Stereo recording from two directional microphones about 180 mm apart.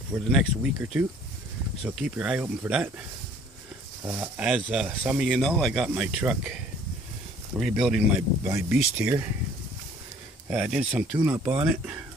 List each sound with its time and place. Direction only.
0.2 s speech: 5° right (ahead or behind)
4.0 s speech: 10° right (ahead or behind)
8.5 s speech: 15° right (ahead or behind)
10.5 s speech: 5° right (ahead or behind)